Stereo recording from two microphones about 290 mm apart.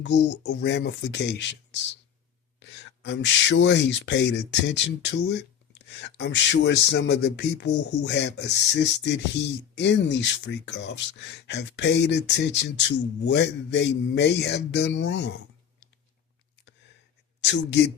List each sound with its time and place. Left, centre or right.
0.0 s speech: left
17.4 s speech: left